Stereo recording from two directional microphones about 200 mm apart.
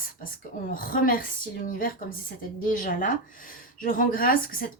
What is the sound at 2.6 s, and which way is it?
A woman's voice, 40° left (ahead or behind).